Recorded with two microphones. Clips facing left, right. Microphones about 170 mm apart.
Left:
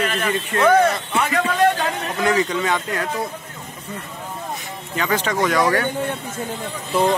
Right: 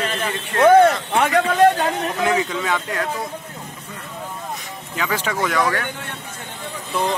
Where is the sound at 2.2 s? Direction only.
Centre (ahead or behind).